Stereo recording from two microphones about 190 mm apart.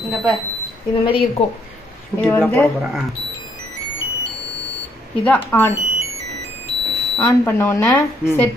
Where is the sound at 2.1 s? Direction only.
10° left (ahead or behind).